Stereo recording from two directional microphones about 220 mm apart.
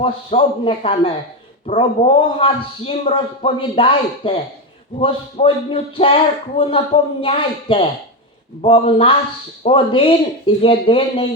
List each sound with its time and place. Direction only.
0.0 s a man's voice: 25° left (ahead or behind)